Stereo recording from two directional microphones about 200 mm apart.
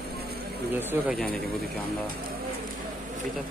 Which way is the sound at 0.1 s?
50° right (ahead or behind).